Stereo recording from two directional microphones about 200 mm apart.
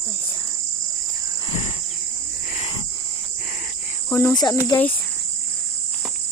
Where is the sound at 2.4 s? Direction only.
40° left (ahead or behind).